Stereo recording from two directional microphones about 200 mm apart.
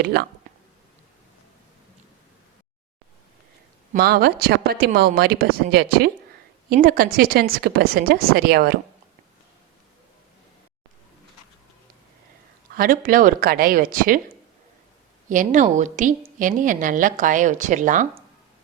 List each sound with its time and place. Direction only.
0.0 s speech: 50° right (ahead or behind)
3.9 s speech: 50° right (ahead or behind)
12.7 s speech: 45° right (ahead or behind)
15.3 s speech: 40° right (ahead or behind)